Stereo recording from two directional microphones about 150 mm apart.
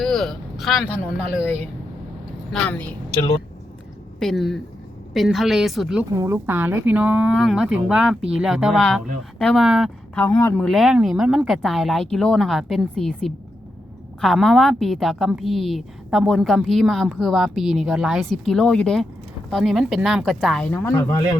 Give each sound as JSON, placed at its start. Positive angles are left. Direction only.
{"t": 0.0, "sound": "vehicle", "side_deg": 0}
{"t": 2.5, "sound": "a woman's voice", "side_deg": 5}
{"t": 6.1, "sound": "a woman's voice", "side_deg": -20}
{"t": 10.2, "sound": "speech", "side_deg": 20}
{"t": 10.6, "sound": "a woman's voice", "side_deg": 0}
{"t": 20.7, "sound": "speech", "side_deg": 20}